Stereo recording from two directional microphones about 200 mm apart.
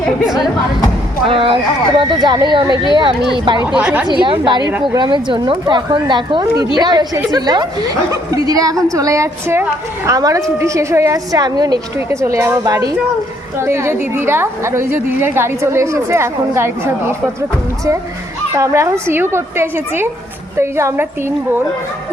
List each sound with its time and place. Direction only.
0.0 s speech: centre (ahead or behind)
1.3 s a woman's voice: 25° right (ahead or behind)
3.8 s a woman's voice: 5° right (ahead or behind)
4.0 s a woman's voice: 25° right (ahead or behind)
18.5 s a woman's voice: 15° right (ahead or behind)